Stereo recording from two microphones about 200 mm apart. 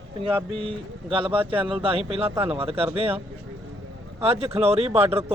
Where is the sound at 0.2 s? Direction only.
25° right (ahead or behind).